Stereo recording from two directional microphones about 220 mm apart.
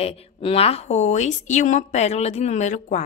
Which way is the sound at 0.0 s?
25° left (ahead or behind).